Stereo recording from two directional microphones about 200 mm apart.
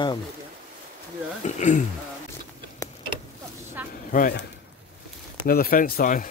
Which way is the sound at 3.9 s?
45° left (ahead or behind).